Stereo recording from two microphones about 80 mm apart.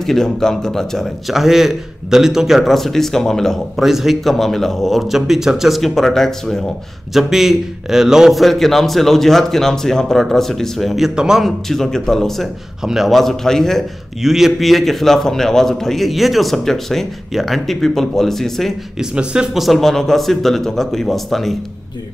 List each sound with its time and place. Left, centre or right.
0.0 s speech: centre
7.2 s speech: centre
18.9 s speech: centre